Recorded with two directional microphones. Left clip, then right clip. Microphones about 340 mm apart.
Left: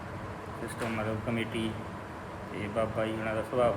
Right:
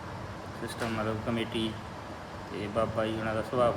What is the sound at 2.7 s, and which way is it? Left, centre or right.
Speech, centre.